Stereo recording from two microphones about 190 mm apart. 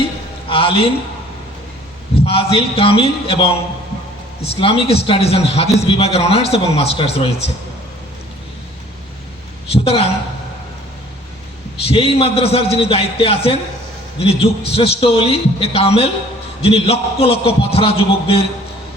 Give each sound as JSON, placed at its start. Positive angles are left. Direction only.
{"t": 0.4, "sound": "a man's voice", "side_deg": 30}
{"t": 2.2, "sound": "a man's voice", "side_deg": 30}
{"t": 4.6, "sound": "a man's voice", "side_deg": 30}
{"t": 9.7, "sound": "a man's voice", "side_deg": 30}
{"t": 11.8, "sound": "a man's voice", "side_deg": 30}